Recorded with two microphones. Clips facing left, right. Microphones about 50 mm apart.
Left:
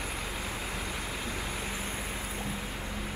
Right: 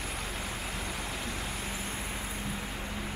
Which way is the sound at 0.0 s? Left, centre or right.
Centre.